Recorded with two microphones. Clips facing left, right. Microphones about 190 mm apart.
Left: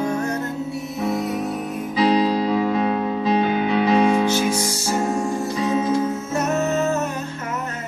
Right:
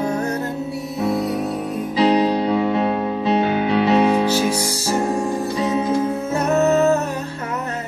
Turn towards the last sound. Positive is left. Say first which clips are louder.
# right 5 dB
turn(degrees=-35)  # may be behind; listen again after turning